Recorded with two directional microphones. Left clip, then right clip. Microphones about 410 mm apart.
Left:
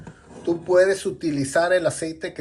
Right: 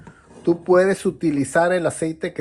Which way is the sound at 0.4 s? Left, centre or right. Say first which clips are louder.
Right 2 dB; centre.